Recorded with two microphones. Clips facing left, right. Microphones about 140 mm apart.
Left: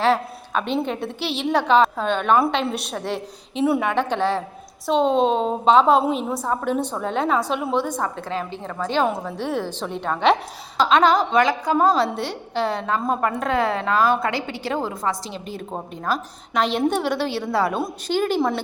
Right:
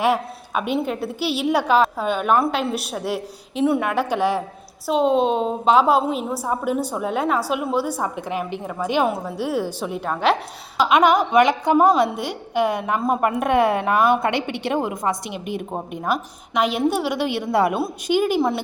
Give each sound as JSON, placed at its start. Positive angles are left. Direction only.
{"t": 0.0, "sound": "a woman's voice", "side_deg": -10}